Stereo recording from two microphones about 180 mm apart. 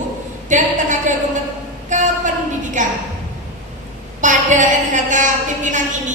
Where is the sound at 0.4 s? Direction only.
45° right (ahead or behind).